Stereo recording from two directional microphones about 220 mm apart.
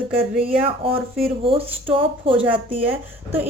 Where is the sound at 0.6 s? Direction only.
25° right (ahead or behind).